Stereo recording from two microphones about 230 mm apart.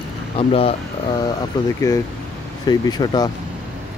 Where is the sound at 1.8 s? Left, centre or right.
Centre.